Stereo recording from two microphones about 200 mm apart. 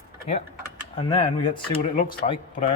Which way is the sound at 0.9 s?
25° left (ahead or behind).